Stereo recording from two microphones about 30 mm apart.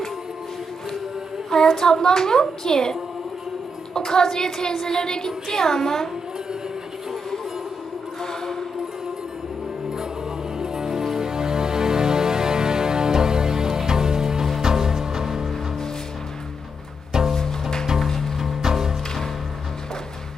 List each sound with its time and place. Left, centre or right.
1.6 s a woman's voice: centre
1.9 s a child's voice: left
8.2 s music: centre
10.6 s music: centre
17.1 s music: centre
17.3 s music: centre
18.3 s music: centre